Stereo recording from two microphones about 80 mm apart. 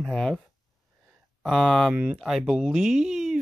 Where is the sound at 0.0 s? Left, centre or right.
Centre.